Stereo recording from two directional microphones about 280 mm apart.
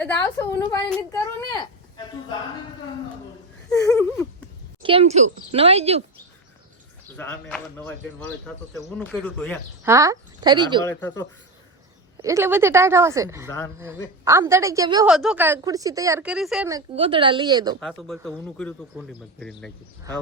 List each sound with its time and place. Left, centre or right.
0.0 s speech: centre
3.7 s speech: centre
4.8 s speech: centre
7.2 s speech: centre
9.8 s a woman's voice: centre
10.8 s speech: centre
12.2 s a woman's voice: centre
15.0 s a woman's voice: centre
16.9 s a woman's voice: centre
17.7 s speech: centre